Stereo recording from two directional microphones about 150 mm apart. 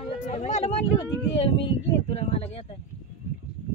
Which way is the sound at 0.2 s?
50° left (ahead or behind).